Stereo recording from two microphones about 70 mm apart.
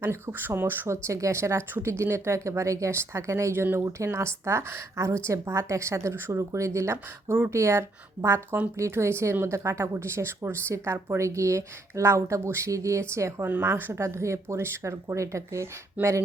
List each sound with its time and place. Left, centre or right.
0.0 s a woman's voice: right
13.7 s a woman's voice: right
14.0 s speech: right